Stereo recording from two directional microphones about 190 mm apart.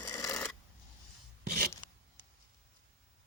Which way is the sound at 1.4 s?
55° right (ahead or behind).